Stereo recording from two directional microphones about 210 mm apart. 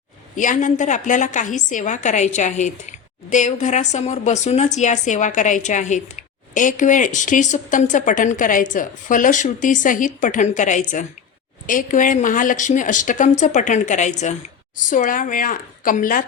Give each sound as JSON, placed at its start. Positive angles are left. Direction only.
{"t": 0.3, "sound": "speech", "side_deg": 35}